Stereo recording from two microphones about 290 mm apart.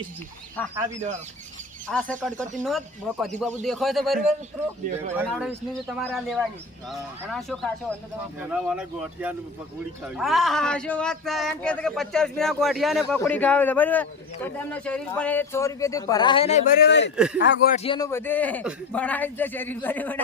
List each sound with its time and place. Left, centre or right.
1.9 s speech: centre
5.2 s speech: centre; by 17.7 s left
17.7 s a man's voice: centre